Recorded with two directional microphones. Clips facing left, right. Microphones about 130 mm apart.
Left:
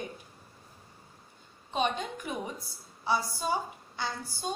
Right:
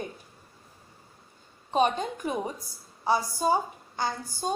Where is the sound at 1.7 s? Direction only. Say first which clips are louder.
Right 6 dB; 45° right (ahead or behind).